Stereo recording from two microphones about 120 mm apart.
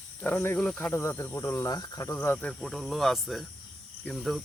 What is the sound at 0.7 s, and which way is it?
Cricket, 20° left (ahead or behind).